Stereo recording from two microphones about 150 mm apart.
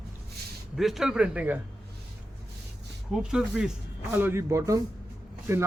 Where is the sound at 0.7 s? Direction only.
Centre (ahead or behind).